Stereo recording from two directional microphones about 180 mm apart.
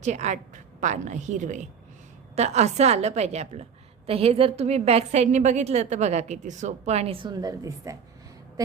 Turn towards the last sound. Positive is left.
turn(degrees=-20)  # may be behind; listen again after turning